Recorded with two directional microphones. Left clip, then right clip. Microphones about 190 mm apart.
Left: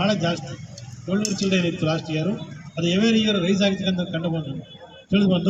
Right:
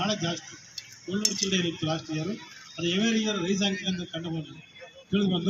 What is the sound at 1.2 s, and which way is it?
Speech, 5° left (ahead or behind).